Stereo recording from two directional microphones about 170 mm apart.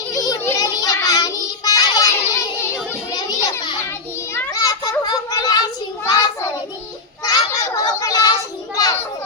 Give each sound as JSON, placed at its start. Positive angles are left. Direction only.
{"t": 0.1, "sound": "child singing", "side_deg": 20}
{"t": 3.2, "sound": "children playing", "side_deg": 25}
{"t": 7.3, "sound": "a sound", "side_deg": 20}